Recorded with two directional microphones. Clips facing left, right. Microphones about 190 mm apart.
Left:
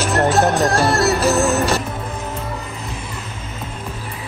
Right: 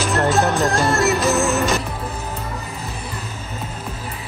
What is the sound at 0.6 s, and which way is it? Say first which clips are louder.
Speech: left 2 dB; 35° left (ahead or behind).